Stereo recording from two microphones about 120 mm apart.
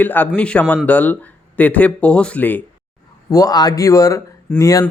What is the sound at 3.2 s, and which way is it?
Speech, 30° left (ahead or behind).